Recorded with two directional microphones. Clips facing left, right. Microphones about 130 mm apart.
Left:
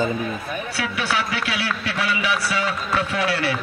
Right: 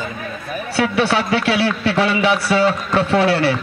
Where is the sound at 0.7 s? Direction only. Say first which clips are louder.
Right 9 dB; 30° right (ahead or behind).